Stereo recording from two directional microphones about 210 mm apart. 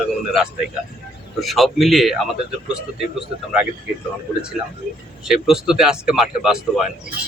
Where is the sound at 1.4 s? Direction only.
Centre (ahead or behind).